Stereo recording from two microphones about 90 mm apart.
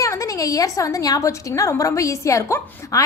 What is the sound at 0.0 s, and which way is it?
A woman's voice, 35° left (ahead or behind).